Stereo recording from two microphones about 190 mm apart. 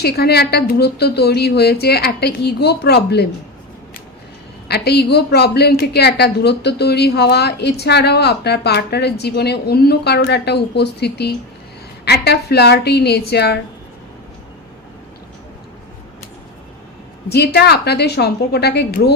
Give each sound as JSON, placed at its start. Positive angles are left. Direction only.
{"t": 0.0, "sound": "a woman's voice", "side_deg": 60}
{"t": 4.7, "sound": "a woman's voice", "side_deg": 60}
{"t": 17.2, "sound": "a woman's voice", "side_deg": 60}